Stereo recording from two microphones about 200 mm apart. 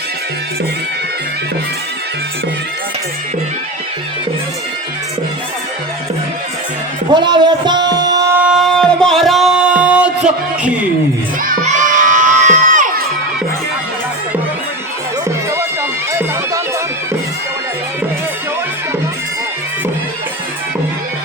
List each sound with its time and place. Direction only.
7.1 s speech: 20° right (ahead or behind)
8.4 s music: 5° right (ahead or behind)
11.4 s children shouting: 40° right (ahead or behind)